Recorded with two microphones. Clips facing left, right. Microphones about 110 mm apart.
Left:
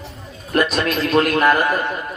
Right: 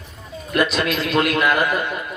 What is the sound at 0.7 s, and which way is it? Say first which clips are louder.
A man's voice: left 3 dB; 40° left (ahead or behind).